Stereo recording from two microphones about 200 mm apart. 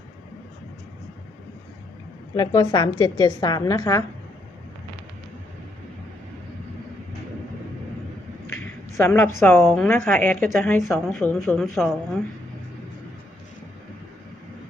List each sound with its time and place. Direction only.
2.3 s a woman's voice: 20° left (ahead or behind)
9.0 s a woman's voice: 10° left (ahead or behind)